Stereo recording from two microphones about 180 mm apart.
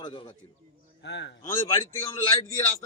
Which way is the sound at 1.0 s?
75° left (ahead or behind).